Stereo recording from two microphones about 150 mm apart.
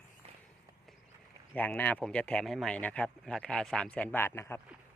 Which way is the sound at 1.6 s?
10° left (ahead or behind).